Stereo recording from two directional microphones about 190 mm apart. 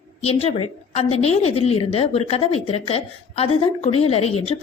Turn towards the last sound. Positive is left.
turn(degrees=30)  # may be behind; listen again after turning